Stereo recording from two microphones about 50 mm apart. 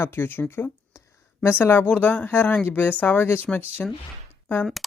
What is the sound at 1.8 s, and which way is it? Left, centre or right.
Speech, left.